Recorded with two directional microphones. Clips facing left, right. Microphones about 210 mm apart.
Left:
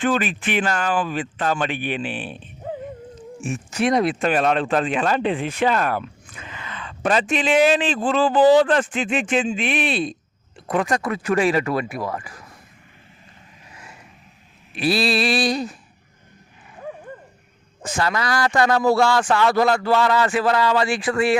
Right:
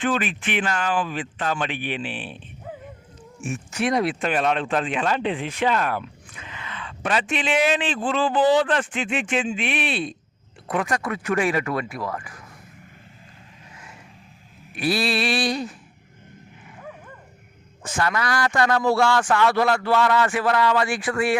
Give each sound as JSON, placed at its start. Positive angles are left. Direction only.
{"t": 0.0, "sound": "speech", "side_deg": 40}
{"t": 2.6, "sound": "a sound", "side_deg": 30}
{"t": 3.4, "sound": "speech", "side_deg": 35}
{"t": 14.8, "sound": "speech", "side_deg": 30}
{"t": 17.9, "sound": "speech", "side_deg": 30}
{"t": 20.8, "sound": "speech", "side_deg": 15}